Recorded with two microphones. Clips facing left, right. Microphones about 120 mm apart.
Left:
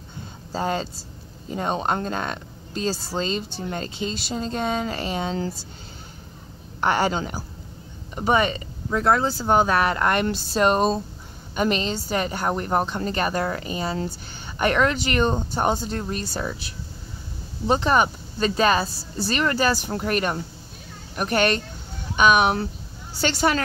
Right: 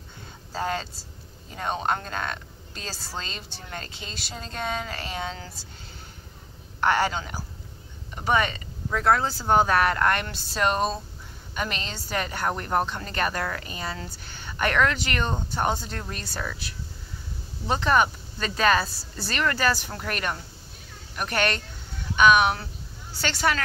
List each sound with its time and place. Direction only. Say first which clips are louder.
0.5 s a woman's voice: left 4 dB; 25° left (ahead or behind)
6.8 s a woman's voice: left 2 dB; 20° left (ahead or behind)
10.2 s a woman's voice: left 6 dB; 25° left (ahead or behind)